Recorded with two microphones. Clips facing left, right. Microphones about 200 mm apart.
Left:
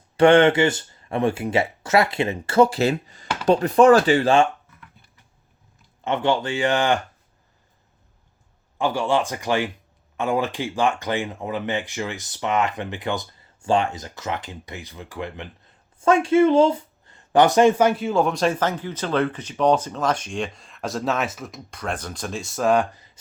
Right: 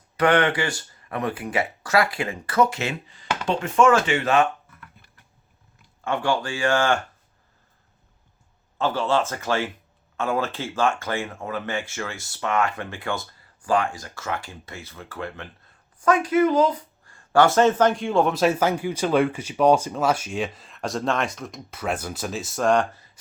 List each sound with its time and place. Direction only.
0.2 s speech: 25° left (ahead or behind)
6.1 s speech: 20° left (ahead or behind)
8.8 s speech: 15° left (ahead or behind)